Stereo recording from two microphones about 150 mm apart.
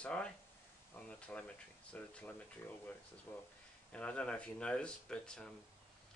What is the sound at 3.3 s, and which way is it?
Speech, 15° left (ahead or behind).